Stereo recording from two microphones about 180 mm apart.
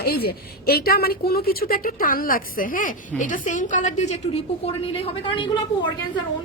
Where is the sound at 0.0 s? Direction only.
60° left (ahead or behind); by 5.9 s 30° left (ahead or behind).